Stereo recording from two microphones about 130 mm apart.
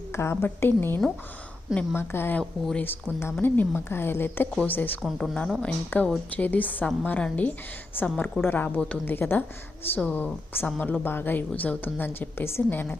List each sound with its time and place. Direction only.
0.1 s a woman's voice: 20° left (ahead or behind)
2.4 s speech: 5° left (ahead or behind)
2.8 s a woman's voice: 20° left (ahead or behind)
5.0 s a woman's voice: centre (ahead or behind); by 13.0 s 15° left (ahead or behind)